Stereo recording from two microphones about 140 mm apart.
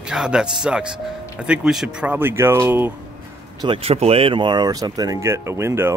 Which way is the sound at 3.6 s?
40° right (ahead or behind).